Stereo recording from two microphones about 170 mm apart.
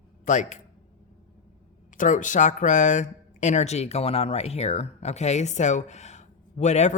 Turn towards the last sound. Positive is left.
turn(degrees=40)  # may be behind; listen again after turning